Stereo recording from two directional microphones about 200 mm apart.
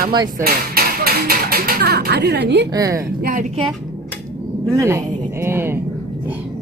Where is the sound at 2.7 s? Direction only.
15° right (ahead or behind).